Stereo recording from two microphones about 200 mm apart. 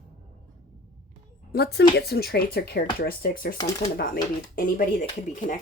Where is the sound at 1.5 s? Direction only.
55° left (ahead or behind).